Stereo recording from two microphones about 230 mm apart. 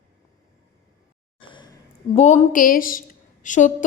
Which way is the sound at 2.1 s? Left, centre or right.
Left.